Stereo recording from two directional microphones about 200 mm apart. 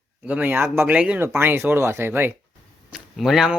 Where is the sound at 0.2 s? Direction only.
10° right (ahead or behind).